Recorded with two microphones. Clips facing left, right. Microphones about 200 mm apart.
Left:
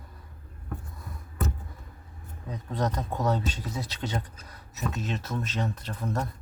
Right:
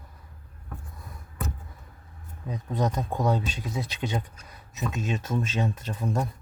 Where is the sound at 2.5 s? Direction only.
10° right (ahead or behind).